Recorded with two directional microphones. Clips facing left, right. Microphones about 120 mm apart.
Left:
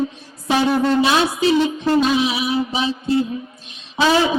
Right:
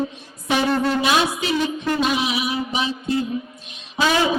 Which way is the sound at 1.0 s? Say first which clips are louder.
Left 4 dB; 30° left (ahead or behind).